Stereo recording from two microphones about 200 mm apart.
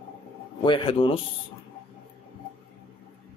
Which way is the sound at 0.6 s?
25° left (ahead or behind).